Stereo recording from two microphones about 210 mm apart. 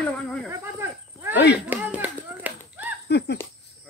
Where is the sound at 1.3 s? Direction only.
55° left (ahead or behind).